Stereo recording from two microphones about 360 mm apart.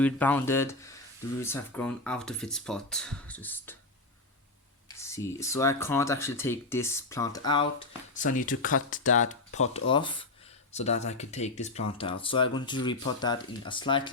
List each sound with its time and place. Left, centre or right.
0.0 s speech: centre
4.9 s speech: centre